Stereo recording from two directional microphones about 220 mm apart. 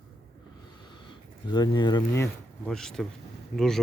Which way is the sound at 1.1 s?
20° left (ahead or behind).